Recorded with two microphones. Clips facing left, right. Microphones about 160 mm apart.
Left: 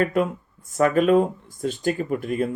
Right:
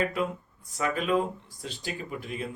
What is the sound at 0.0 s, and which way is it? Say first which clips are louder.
Speech: left 7 dB; 50° left (ahead or behind).